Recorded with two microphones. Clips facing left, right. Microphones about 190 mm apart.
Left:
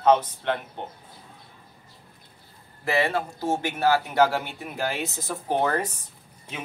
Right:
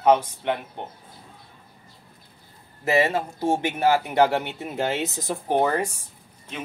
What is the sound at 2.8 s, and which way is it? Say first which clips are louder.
Speech: right 3 dB; 20° right (ahead or behind).